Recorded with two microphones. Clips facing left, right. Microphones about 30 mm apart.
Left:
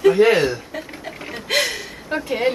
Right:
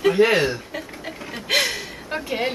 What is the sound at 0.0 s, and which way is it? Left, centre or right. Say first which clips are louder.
Speech: left 3 dB; centre.